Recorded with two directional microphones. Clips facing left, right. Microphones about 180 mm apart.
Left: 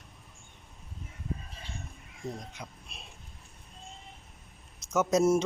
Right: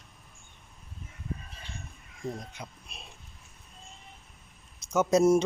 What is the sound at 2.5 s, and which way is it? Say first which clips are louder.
Speech: right 1 dB; centre (ahead or behind).